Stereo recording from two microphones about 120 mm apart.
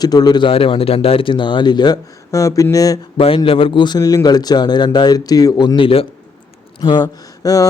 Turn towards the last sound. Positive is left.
turn(degrees=30)  # may be behind; listen again after turning